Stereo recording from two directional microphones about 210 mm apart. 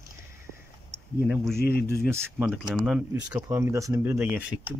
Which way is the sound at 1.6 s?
50° left (ahead or behind).